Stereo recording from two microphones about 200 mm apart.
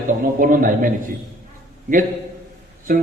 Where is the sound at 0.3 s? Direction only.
45° right (ahead or behind).